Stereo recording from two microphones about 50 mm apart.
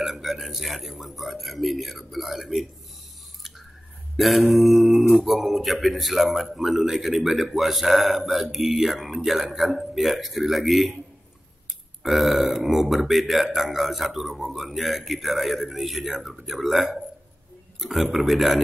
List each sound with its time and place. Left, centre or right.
0.0 s a man's voice: centre
4.2 s a man's voice: centre
12.0 s a man's voice: centre